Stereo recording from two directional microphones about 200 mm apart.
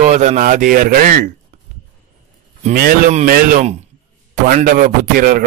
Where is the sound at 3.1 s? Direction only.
45° right (ahead or behind).